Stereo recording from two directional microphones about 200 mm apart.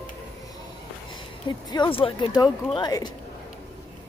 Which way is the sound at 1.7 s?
25° left (ahead or behind).